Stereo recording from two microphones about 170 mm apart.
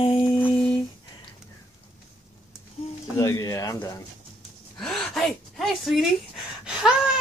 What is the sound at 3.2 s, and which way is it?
Speech, 20° left (ahead or behind).